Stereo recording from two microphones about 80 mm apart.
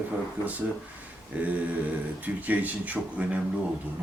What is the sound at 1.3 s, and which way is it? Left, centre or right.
Speech, centre.